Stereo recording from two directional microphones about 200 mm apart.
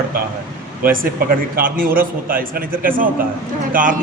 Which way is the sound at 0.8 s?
45° right (ahead or behind).